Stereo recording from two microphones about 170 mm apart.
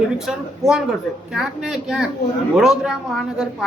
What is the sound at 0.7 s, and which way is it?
Speech, 5° right (ahead or behind).